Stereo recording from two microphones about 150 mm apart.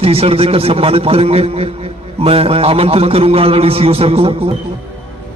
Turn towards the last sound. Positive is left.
turn(degrees=-40)  # may be behind; listen again after turning